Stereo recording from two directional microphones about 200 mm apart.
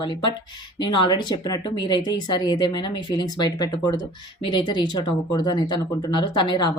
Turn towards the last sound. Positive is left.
turn(degrees=20)  # may be behind; listen again after turning